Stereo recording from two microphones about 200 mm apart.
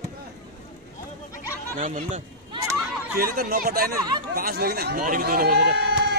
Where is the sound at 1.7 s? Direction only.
35° right (ahead or behind).